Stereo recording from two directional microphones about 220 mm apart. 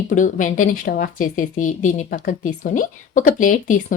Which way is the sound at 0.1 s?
35° left (ahead or behind).